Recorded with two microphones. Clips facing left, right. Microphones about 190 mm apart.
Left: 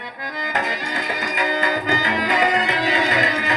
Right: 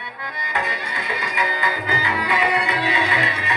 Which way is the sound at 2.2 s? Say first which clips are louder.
Left 1 dB; 40° left (ahead or behind).